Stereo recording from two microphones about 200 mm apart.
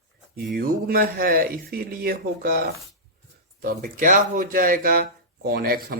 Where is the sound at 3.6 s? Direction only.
45° right (ahead or behind).